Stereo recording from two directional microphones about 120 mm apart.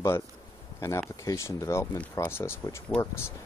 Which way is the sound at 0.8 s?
25° left (ahead or behind).